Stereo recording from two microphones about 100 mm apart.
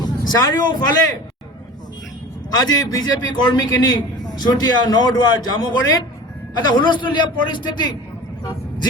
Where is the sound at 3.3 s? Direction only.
45° left (ahead or behind).